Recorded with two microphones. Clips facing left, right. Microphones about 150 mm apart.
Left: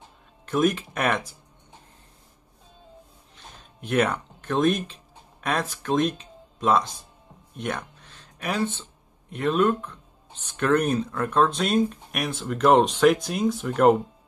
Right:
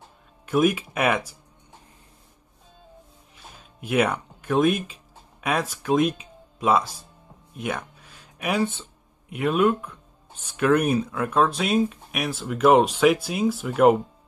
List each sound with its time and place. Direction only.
0.5 s speech: 10° right (ahead or behind)
3.3 s music: 5° right (ahead or behind)
5.4 s speech: 10° right (ahead or behind)
7.5 s a sound: 5° right (ahead or behind)
9.3 s speech: 10° right (ahead or behind)